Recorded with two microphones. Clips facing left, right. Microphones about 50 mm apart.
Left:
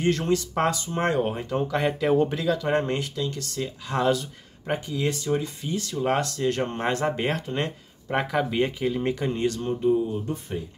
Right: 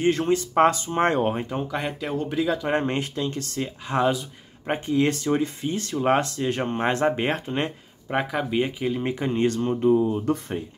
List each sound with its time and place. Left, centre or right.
0.0 s speech: right
1.6 s speech: centre
2.4 s speech: centre
4.6 s speech: right
8.1 s speech: centre
9.1 s speech: right